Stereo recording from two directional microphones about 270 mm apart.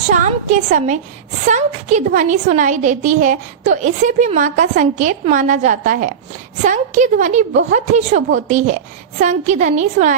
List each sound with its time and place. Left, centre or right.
0.1 s a woman's voice: right